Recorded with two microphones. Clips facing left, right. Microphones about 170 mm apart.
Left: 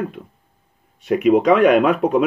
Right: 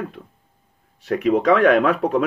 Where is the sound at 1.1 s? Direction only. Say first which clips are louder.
Left 3 dB; 15° left (ahead or behind).